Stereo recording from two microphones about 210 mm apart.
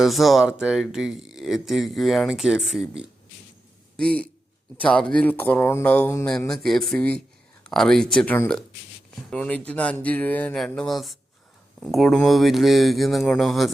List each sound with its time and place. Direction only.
0.0 s a man's voice: centre (ahead or behind)